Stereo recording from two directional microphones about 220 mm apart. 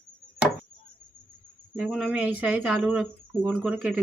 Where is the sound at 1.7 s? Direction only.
5° right (ahead or behind).